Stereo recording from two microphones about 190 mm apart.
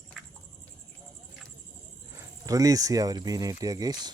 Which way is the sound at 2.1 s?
20° right (ahead or behind).